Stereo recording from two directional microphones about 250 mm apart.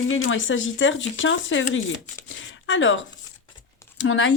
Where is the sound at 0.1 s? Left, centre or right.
Left.